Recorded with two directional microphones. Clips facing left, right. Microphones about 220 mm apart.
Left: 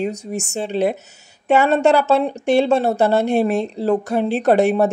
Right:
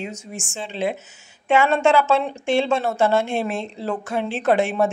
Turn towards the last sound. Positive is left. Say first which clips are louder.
# left 4 dB
turn(degrees=40)  # may be behind; listen again after turning